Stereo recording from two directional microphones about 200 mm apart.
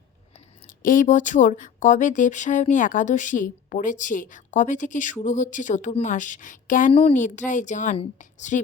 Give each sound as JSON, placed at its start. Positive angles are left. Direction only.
{"t": 0.7, "sound": "speech", "side_deg": 45}